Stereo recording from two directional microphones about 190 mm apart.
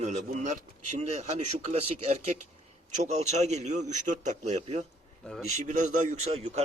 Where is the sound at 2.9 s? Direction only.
35° right (ahead or behind).